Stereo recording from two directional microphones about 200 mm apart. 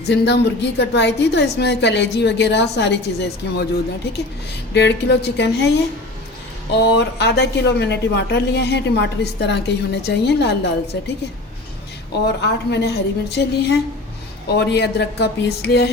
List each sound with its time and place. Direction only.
0.1 s a woman's voice: 60° left (ahead or behind)
4.7 s a woman's voice: 60° left (ahead or behind)
12.4 s a woman's voice: 60° left (ahead or behind)